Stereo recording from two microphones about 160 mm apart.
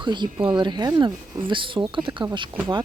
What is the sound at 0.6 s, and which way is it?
Speech, 25° right (ahead or behind).